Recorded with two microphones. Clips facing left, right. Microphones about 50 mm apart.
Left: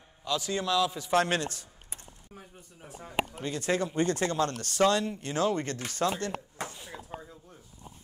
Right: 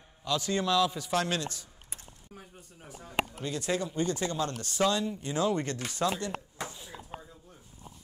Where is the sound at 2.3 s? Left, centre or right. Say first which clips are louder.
Even; left.